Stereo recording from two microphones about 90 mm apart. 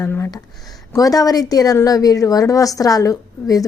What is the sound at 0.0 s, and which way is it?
Speech, 30° left (ahead or behind).